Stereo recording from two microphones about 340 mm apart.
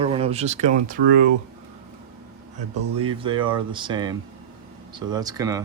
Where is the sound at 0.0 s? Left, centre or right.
Centre.